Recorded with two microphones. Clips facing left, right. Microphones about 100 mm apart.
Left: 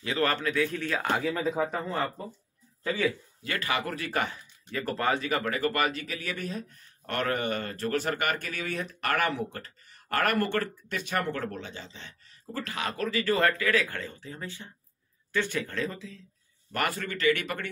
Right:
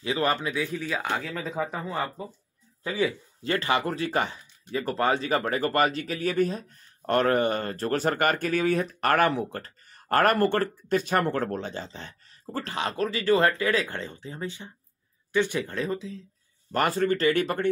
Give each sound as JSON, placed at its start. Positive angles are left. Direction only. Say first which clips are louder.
{"t": 0.0, "sound": "a man's voice", "louder": "right 2 dB", "side_deg": -15}
{"t": 3.4, "sound": "speech", "louder": "right 5 dB", "side_deg": -30}
{"t": 16.7, "sound": "speech", "louder": "right 7 dB", "side_deg": -30}